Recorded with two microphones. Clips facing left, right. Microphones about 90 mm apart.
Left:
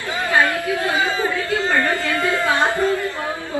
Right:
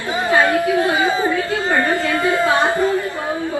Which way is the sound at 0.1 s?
20° right (ahead or behind).